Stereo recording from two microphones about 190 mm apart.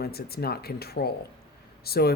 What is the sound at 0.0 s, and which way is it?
Speech, 55° left (ahead or behind).